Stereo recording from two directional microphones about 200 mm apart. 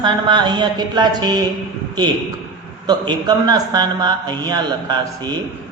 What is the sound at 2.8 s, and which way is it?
A man's voice, 20° right (ahead or behind).